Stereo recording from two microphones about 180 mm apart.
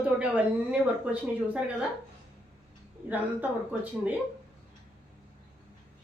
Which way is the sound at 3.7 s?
5° right (ahead or behind).